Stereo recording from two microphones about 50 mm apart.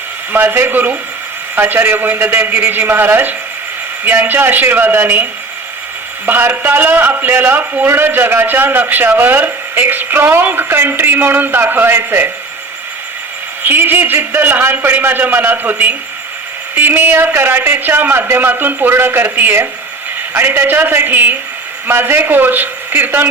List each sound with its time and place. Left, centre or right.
0.3 s a man's voice: right
13.7 s a man's voice: right
16.7 s a man's voice: right